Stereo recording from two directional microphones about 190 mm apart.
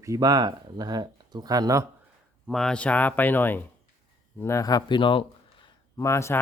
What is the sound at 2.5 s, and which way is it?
Speech, centre (ahead or behind).